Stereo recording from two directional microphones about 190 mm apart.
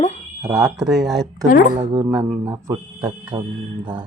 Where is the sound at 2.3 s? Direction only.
15° right (ahead or behind).